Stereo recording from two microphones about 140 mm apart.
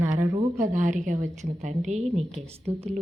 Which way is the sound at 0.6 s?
70° right (ahead or behind).